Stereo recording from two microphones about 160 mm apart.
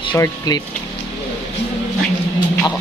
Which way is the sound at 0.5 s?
25° left (ahead or behind).